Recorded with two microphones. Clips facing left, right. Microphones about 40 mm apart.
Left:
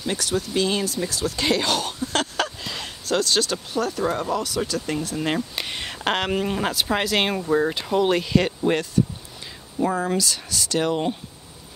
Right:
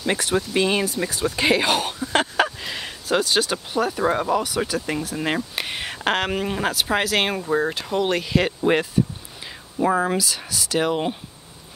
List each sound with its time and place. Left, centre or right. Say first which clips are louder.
0.0 s speech: right 3 dB; right